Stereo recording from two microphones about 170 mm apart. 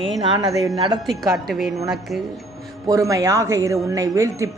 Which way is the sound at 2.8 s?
20° right (ahead or behind).